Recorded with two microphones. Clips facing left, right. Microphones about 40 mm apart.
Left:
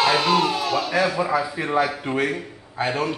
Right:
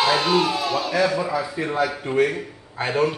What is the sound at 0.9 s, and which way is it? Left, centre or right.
Speech, centre.